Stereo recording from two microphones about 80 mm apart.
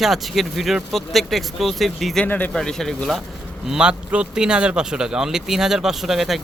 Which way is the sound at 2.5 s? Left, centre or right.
Centre.